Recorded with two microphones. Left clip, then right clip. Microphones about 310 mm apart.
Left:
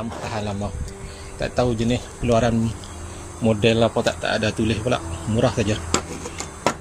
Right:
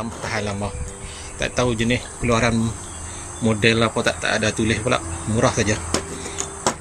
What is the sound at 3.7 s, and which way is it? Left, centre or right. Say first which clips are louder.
Speech: even; centre.